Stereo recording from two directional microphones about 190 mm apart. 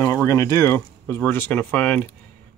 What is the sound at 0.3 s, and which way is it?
Speech, 15° left (ahead or behind).